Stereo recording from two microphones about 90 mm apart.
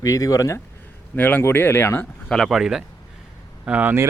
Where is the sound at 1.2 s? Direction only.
20° left (ahead or behind).